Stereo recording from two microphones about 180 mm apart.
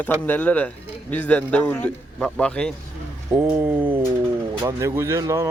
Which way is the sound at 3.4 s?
10° right (ahead or behind).